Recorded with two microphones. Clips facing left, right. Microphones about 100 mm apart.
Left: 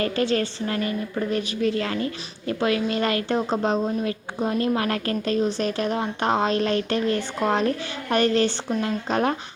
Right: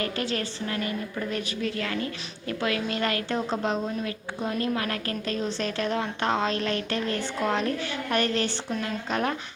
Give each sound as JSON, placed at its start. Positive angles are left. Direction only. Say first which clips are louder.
{"t": 0.0, "sound": "a woman's voice", "louder": "left 6 dB", "side_deg": 35}
{"t": 5.5, "sound": "a woman's voice", "louder": "left 4 dB", "side_deg": 15}